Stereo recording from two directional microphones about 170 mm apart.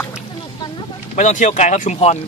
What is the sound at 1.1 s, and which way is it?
Speech, 45° left (ahead or behind).